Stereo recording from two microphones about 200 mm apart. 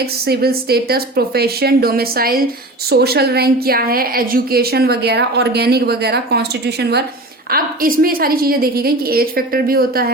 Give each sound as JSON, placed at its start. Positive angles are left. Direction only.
{"t": 0.3, "sound": "a woman's voice", "side_deg": -50}